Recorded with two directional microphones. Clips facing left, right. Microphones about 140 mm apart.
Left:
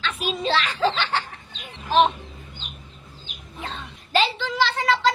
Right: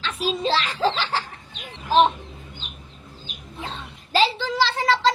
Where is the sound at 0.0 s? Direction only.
35° right (ahead or behind).